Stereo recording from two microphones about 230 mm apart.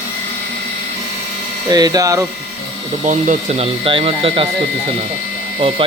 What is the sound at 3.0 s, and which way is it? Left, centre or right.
Speech, right.